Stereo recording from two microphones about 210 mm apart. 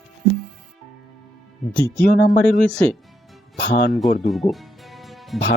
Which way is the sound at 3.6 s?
50° left (ahead or behind).